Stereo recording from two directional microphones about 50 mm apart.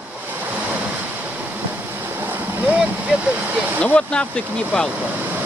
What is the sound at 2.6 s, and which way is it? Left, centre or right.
Speech, right.